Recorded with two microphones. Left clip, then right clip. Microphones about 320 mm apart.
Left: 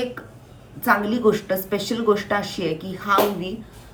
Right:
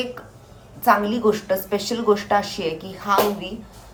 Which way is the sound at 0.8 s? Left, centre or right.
Centre.